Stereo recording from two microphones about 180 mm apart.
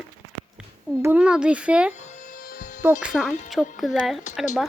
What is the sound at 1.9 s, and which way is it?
Music, 40° left (ahead or behind).